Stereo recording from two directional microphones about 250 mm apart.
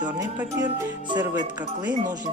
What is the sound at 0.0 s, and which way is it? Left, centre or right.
Speech, centre.